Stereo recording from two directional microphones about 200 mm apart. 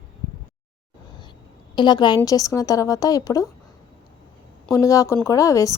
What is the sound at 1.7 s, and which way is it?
A woman's voice, 20° left (ahead or behind).